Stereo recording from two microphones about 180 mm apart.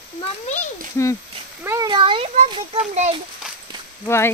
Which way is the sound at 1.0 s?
15° left (ahead or behind).